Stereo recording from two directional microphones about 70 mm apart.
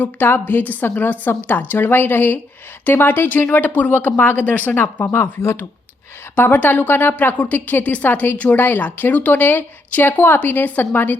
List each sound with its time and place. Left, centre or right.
0.0 s a woman's voice: left
6.3 s a woman's voice: left